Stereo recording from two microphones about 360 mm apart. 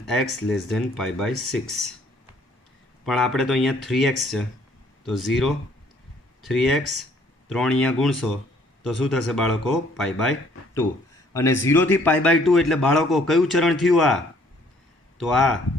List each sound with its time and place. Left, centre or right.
0.1 s speech: centre
3.1 s speech: centre
11.6 s speech: centre
15.2 s speech: centre